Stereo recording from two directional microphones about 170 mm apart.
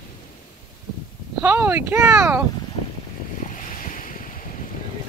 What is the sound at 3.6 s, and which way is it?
Waves, 55° left (ahead or behind).